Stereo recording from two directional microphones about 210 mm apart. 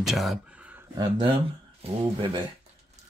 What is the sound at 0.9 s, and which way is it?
Speech, 25° right (ahead or behind).